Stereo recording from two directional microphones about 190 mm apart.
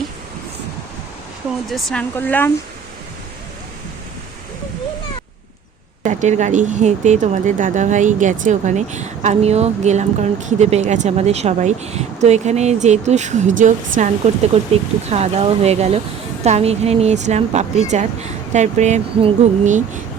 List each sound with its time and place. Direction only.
1.6 s speech: centre (ahead or behind)
6.0 s speech: 40° right (ahead or behind)